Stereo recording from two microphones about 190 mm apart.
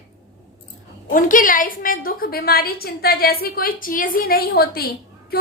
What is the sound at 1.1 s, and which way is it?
A woman's voice, 45° left (ahead or behind).